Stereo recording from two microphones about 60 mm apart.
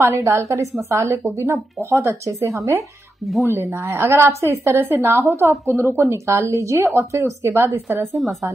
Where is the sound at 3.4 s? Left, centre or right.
Right.